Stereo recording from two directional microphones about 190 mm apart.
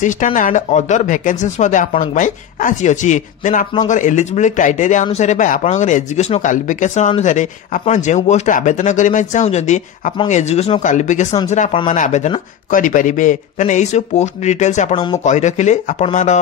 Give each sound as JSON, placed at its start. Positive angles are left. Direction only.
{"t": 0.0, "sound": "speech", "side_deg": 40}